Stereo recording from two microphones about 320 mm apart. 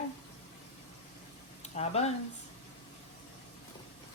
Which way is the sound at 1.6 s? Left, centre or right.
Centre.